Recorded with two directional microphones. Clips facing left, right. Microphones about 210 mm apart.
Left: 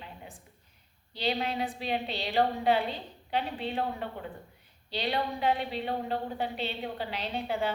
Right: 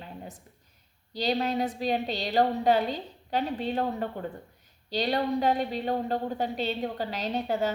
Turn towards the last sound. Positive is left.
turn(degrees=-40)  # may be behind; listen again after turning